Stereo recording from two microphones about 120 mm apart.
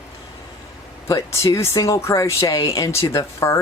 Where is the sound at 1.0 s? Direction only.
25° left (ahead or behind).